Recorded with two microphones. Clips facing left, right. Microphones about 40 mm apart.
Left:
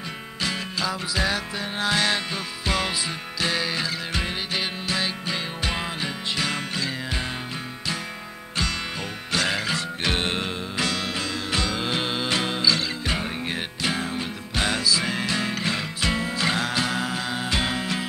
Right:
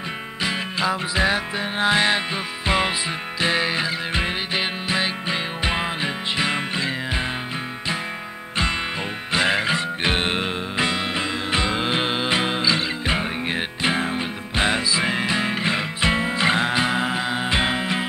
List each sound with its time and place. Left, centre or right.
0.4 s music: right
9.3 s music: right